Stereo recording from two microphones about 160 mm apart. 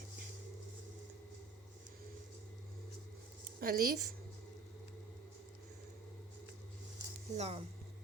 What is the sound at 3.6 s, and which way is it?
Speech, 70° right (ahead or behind).